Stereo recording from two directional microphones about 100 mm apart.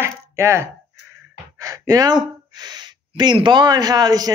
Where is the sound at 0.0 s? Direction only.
30° right (ahead or behind).